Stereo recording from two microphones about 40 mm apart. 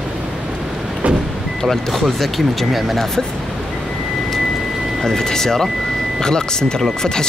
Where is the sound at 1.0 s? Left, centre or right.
Right.